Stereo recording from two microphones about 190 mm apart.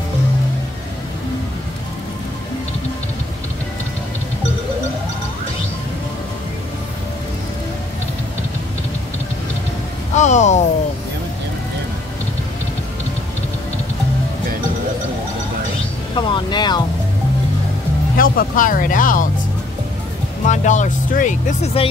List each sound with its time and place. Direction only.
10.1 s a sound: 40° left (ahead or behind)
16.2 s music: 25° left (ahead or behind)
18.1 s music: 45° left (ahead or behind)
20.4 s speech: 40° left (ahead or behind)